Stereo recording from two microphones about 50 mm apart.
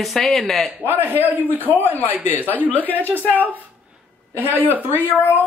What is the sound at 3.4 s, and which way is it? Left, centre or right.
Speech, right.